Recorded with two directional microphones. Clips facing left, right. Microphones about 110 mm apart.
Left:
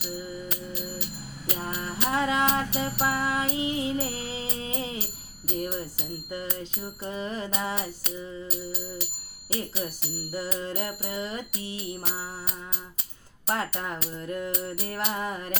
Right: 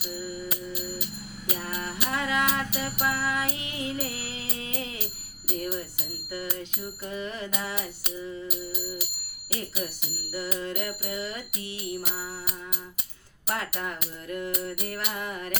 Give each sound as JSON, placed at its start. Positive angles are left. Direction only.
{"t": 1.6, "sound": "music", "side_deg": 25}
{"t": 5.5, "sound": "bicycle bell", "side_deg": 25}
{"t": 6.3, "sound": "music", "side_deg": 25}
{"t": 8.4, "sound": "music", "side_deg": -10}
{"t": 10.3, "sound": "music", "side_deg": 30}
{"t": 13.5, "sound": "music", "side_deg": 30}